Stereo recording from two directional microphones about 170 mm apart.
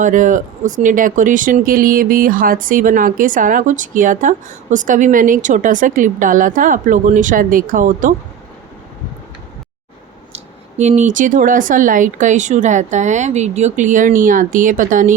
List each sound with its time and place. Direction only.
0.0 s speech: 50° right (ahead or behind)
10.3 s speech: 45° right (ahead or behind)